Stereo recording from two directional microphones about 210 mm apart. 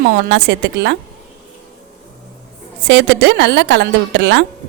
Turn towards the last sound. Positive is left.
turn(degrees=-55)  # may be behind; listen again after turning